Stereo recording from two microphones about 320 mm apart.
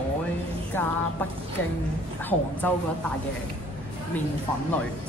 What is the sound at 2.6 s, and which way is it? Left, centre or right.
Speech, centre.